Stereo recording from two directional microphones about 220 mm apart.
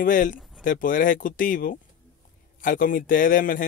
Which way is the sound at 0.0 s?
35° left (ahead or behind).